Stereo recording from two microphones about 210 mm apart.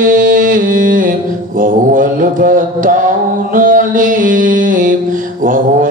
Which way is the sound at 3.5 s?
40° right (ahead or behind).